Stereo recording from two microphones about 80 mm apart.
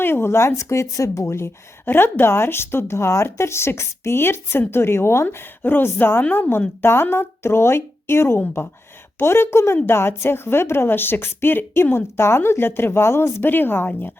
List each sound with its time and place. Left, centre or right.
0.0 s a woman's voice: left